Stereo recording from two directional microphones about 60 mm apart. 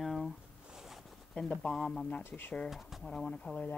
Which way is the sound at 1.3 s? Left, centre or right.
Centre.